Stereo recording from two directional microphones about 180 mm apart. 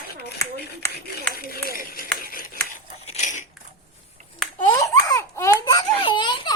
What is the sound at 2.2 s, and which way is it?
Scissors, 55° left (ahead or behind).